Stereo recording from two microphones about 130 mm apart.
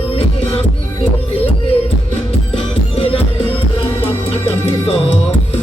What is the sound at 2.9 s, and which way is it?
Music, 50° left (ahead or behind).